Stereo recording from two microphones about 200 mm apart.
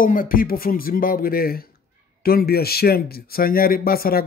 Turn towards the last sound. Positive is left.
turn(degrees=50)  # may be behind; listen again after turning